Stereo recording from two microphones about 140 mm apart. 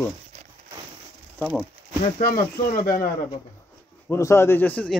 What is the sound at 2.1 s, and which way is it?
Speech, 90° left.